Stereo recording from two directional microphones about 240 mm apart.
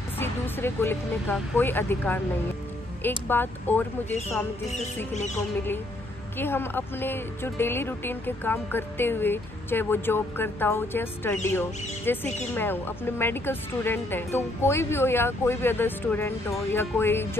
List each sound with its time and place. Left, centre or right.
0.2 s speech: centre
5.1 s speech: left
6.3 s speech: centre